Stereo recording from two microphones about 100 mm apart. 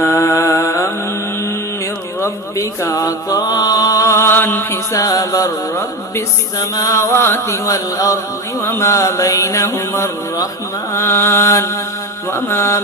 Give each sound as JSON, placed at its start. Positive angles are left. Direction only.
{"t": 0.0, "sound": "music", "side_deg": 25}
{"t": 2.2, "sound": "music", "side_deg": 30}
{"t": 8.6, "sound": "mantra", "side_deg": 25}